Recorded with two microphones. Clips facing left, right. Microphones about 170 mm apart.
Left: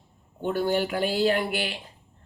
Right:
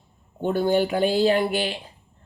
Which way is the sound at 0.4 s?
20° right (ahead or behind).